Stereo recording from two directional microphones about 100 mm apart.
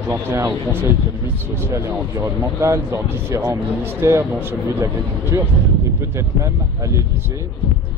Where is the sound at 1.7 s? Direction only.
30° right (ahead or behind).